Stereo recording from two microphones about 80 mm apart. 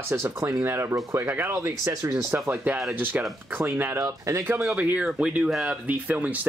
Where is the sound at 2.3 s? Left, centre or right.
Right.